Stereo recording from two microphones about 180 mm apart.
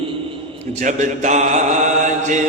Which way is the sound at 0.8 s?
40° right (ahead or behind).